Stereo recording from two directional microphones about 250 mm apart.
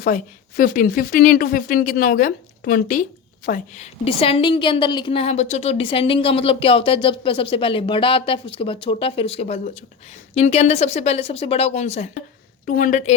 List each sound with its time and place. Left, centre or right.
0.0 s a woman's voice: left